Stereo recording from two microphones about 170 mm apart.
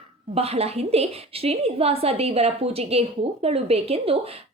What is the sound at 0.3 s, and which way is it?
A woman's voice, 35° right (ahead or behind).